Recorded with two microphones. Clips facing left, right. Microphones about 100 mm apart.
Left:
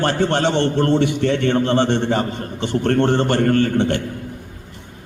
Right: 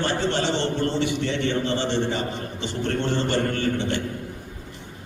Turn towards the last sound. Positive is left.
turn(degrees=55)  # may be behind; listen again after turning